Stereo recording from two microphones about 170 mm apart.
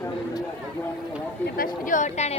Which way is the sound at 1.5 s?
55° left (ahead or behind).